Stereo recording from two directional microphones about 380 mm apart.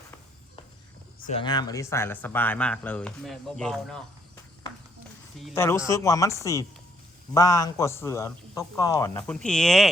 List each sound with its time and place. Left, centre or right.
1.3 s speech: centre
5.4 s a man's voice: centre